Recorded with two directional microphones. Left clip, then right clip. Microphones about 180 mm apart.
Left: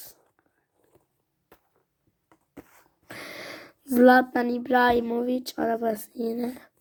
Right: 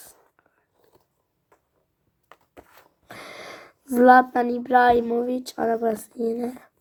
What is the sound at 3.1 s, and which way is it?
Speech, 25° left (ahead or behind).